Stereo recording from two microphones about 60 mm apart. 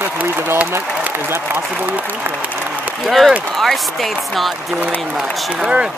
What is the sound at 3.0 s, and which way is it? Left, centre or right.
Speech, centre.